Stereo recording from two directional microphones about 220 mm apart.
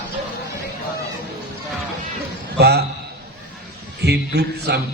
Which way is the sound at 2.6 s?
50° right (ahead or behind).